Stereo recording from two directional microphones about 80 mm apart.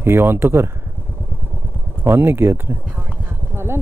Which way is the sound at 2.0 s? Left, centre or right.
Right.